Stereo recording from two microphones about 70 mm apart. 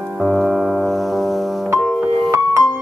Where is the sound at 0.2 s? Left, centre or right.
Centre.